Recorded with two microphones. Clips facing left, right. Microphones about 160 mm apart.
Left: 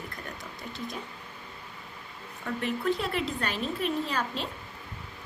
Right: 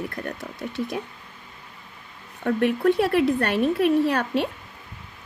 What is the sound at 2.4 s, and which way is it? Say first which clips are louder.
Speech: right 10 dB; 60° right (ahead or behind).